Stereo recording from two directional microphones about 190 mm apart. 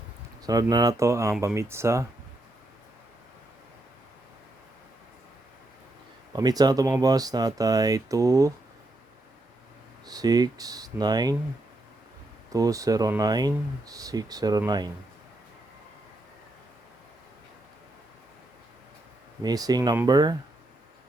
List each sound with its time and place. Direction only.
0.4 s speech: 20° right (ahead or behind)
6.3 s speech: 20° right (ahead or behind)
10.1 s speech: 20° right (ahead or behind)
12.5 s speech: 20° right (ahead or behind)
19.4 s speech: 20° right (ahead or behind)